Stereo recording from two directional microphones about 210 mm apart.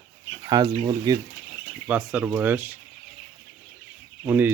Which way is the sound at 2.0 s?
5° right (ahead or behind).